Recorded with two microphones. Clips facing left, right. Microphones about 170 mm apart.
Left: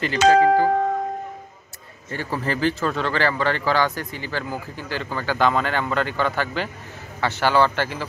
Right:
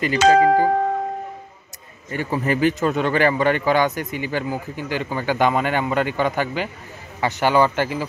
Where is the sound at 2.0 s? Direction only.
15° right (ahead or behind).